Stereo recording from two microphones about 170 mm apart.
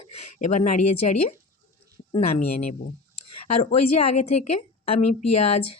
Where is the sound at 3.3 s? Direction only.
35° left (ahead or behind).